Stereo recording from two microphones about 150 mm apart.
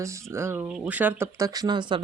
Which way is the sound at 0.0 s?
20° right (ahead or behind).